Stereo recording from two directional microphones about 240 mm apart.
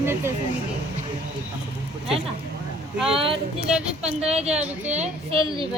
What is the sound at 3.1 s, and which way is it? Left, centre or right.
Speech, right.